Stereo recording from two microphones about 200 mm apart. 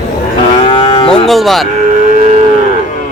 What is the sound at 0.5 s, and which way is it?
Livestock, 25° left (ahead or behind).